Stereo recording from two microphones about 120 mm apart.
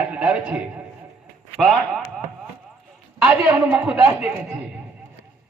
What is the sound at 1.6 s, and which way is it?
Speech, centre (ahead or behind).